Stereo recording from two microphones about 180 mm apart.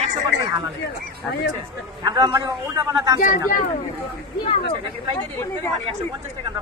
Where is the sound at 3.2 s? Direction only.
50° left (ahead or behind).